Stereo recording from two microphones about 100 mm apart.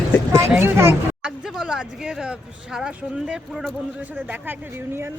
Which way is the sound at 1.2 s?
10° right (ahead or behind).